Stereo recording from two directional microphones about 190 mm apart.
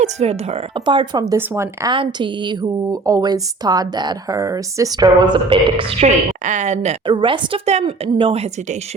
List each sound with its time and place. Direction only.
0.0 s speech: 35° right (ahead or behind)
0.9 s a woman's voice: 25° right (ahead or behind)
6.4 s speech: 40° right (ahead or behind)
7.1 s a woman's voice: 25° right (ahead or behind)